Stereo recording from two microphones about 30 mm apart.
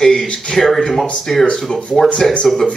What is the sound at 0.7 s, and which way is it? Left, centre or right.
Speech, centre.